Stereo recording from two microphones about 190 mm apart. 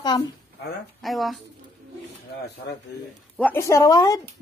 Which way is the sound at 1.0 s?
Centre (ahead or behind).